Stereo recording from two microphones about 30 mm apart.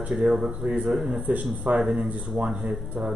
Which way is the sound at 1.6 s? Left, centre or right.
Right.